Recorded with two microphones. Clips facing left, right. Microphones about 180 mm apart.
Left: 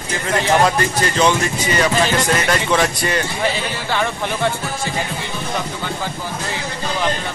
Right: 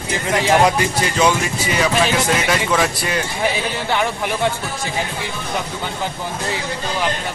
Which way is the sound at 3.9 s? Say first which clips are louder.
Even; 15° right (ahead or behind).